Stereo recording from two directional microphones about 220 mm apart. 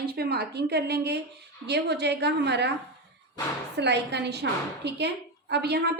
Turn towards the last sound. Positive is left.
turn(degrees=-45)  # may be behind; listen again after turning